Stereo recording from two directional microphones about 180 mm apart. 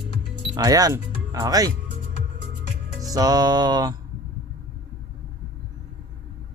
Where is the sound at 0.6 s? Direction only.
20° right (ahead or behind).